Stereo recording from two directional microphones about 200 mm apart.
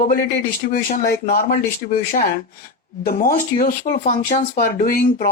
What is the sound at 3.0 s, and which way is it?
Speech, 50° left (ahead or behind).